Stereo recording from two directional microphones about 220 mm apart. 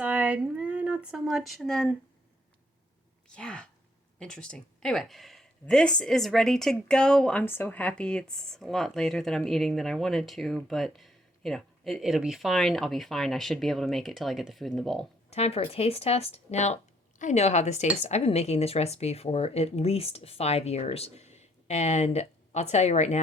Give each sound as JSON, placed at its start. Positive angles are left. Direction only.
{"t": 0.0, "sound": "a sound", "side_deg": -5}
{"t": 3.3, "sound": "speech", "side_deg": 5}
{"t": 15.3, "sound": "a woman's voice", "side_deg": 30}